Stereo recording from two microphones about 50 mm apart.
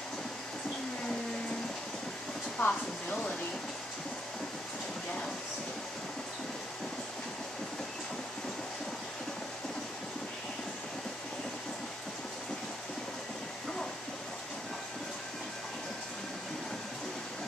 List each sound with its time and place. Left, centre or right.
2.6 s speech: left